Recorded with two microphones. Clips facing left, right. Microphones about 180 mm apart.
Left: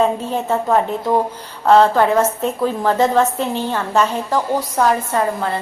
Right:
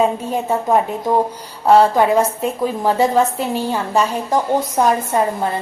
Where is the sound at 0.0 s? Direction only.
10° right (ahead or behind).